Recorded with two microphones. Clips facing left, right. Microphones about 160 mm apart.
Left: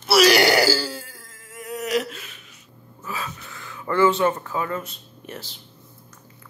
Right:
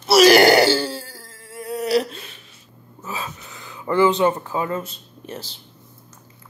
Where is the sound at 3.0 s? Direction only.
20° right (ahead or behind).